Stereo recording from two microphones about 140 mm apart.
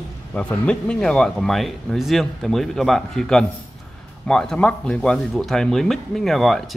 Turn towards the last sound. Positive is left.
turn(degrees=0)  # may be behind; listen again after turning